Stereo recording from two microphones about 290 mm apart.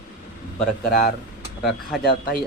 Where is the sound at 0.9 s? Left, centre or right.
Left.